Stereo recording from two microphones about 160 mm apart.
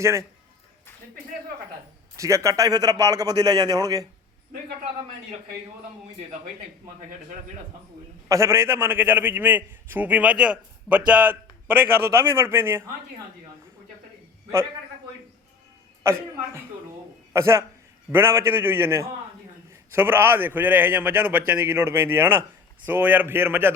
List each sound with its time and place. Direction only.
0.0 s a man's voice: 20° right (ahead or behind)
2.1 s speech: 20° right (ahead or behind)
8.3 s a man's voice: 15° right (ahead or behind)
16.0 s a man's voice: 15° right (ahead or behind)